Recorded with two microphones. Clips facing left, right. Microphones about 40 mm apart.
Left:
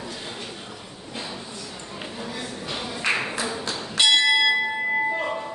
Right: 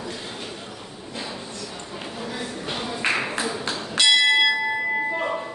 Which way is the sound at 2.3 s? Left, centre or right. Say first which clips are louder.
Right 3 dB; right.